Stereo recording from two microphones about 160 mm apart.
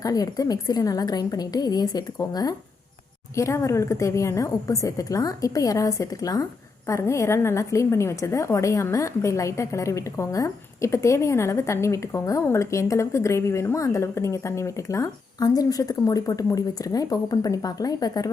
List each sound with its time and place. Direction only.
0.0 s a woman's voice: 20° left (ahead or behind)